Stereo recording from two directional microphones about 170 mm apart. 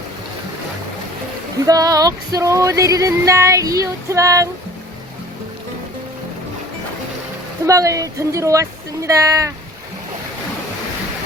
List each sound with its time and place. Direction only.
1.6 s music: 20° right (ahead or behind)
7.7 s music: 20° right (ahead or behind)